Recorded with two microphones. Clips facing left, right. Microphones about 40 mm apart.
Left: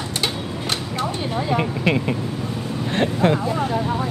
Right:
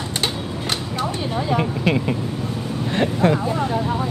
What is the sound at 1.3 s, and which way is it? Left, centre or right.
Speech, centre.